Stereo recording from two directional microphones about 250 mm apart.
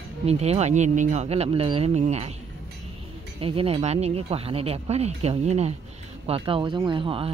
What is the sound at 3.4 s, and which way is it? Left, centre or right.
Speech, right.